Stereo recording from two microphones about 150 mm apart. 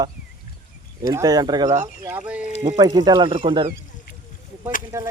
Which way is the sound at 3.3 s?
40° right (ahead or behind).